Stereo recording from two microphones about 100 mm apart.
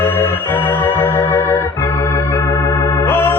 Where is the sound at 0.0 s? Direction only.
20° left (ahead or behind).